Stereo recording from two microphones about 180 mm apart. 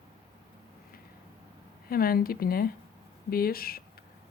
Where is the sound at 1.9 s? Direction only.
55° left (ahead or behind).